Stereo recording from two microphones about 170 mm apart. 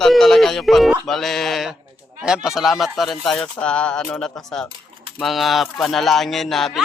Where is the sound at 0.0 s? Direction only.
Centre (ahead or behind).